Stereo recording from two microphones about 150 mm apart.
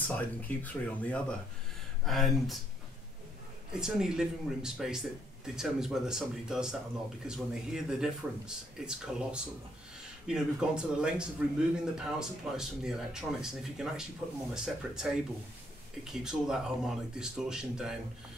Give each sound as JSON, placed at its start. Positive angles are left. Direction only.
{"t": 0.1, "sound": "speech", "side_deg": 10}
{"t": 3.7, "sound": "speech", "side_deg": -5}